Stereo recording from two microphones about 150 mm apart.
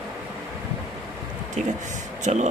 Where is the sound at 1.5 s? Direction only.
55° right (ahead or behind).